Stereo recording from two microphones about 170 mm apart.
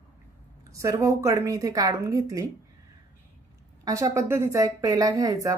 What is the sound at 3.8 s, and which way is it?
A woman's voice, 20° right (ahead or behind).